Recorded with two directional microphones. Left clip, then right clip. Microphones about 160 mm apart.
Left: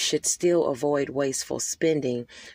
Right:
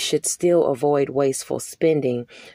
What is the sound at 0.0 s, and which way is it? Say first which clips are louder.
Speech: right 3 dB; 25° right (ahead or behind).